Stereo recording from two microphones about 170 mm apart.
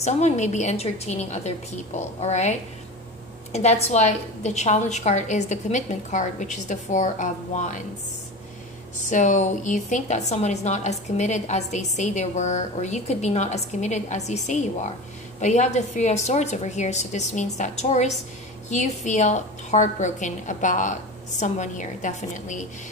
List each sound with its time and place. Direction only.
0.0 s a woman's voice: 45° left (ahead or behind)
3.5 s a woman's voice: 40° left (ahead or behind)
9.0 s a woman's voice: 45° left (ahead or behind)